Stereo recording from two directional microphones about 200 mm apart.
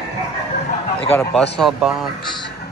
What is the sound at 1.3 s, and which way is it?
Speech, centre (ahead or behind).